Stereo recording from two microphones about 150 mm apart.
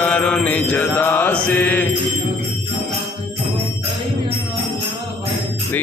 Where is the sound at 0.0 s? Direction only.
10° left (ahead or behind).